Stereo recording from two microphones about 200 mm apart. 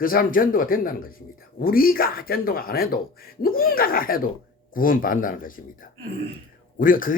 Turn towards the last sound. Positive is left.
turn(degrees=45)  # may be behind; listen again after turning